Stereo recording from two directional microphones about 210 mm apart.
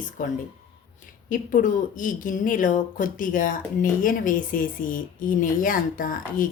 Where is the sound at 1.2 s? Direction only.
40° left (ahead or behind).